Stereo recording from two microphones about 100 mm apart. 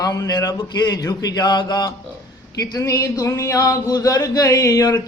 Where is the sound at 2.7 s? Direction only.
30° left (ahead or behind).